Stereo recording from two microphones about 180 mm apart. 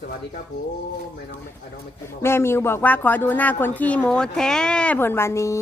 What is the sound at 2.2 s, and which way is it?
Speech, 15° left (ahead or behind).